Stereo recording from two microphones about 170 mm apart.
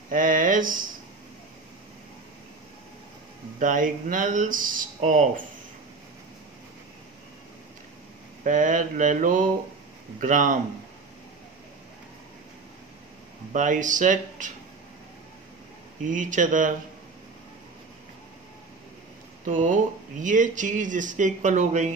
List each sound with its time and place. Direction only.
0.1 s speech: 50° right (ahead or behind)
3.5 s speech: 50° right (ahead or behind)
8.5 s speech: 50° right (ahead or behind)
13.5 s speech: 50° right (ahead or behind)
16.0 s speech: 50° right (ahead or behind)
19.4 s speech: 50° right (ahead or behind)